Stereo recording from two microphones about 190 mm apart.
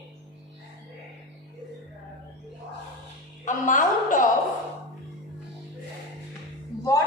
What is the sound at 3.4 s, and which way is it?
Speech, 40° left (ahead or behind).